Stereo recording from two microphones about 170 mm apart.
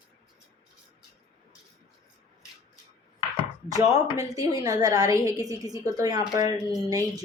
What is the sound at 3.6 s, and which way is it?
A woman's voice, 20° right (ahead or behind).